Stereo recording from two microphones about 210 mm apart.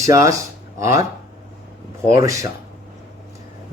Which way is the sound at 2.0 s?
15° right (ahead or behind).